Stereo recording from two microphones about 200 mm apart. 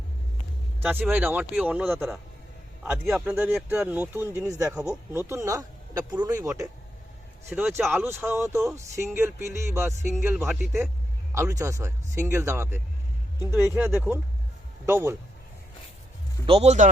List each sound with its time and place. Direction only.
0.8 s speech: 5° right (ahead or behind)
16.5 s speech: 30° right (ahead or behind)